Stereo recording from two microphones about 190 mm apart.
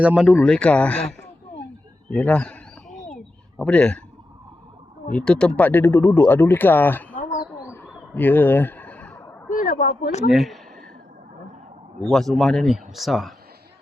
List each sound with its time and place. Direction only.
0.0 s speech: 5° right (ahead or behind)
0.3 s speech: 5° left (ahead or behind)
2.0 s wild animals: 5° left (ahead or behind)
3.6 s speech: 5° left (ahead or behind)
5.1 s speech: 5° left (ahead or behind)
8.1 s a sound: 10° left (ahead or behind)
9.5 s speech: 45° left (ahead or behind)
10.2 s speech: centre (ahead or behind)
12.0 s speech: centre (ahead or behind)